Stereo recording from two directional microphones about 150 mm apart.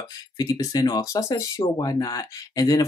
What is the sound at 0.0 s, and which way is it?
Speech, 25° left (ahead or behind).